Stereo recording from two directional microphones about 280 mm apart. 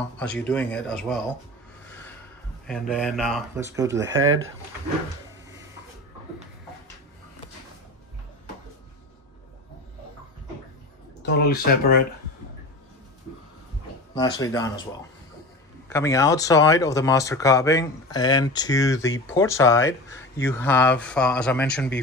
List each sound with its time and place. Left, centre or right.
0.2 s speech: centre
2.6 s speech: centre
3.6 s speech: centre
11.2 s speech: left
14.1 s speech: centre